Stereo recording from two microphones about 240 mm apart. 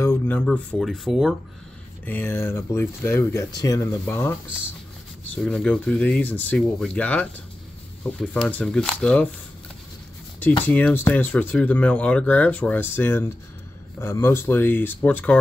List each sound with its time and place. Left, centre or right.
0.0 s speech: centre
10.7 s speech: centre